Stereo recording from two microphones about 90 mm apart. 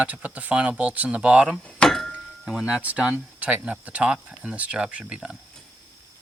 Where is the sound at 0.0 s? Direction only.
15° right (ahead or behind).